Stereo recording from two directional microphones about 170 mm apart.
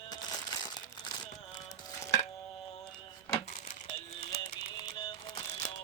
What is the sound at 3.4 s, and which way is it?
Music, 35° left (ahead or behind).